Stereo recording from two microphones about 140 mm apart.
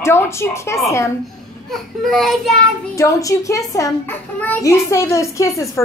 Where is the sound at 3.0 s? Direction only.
25° left (ahead or behind).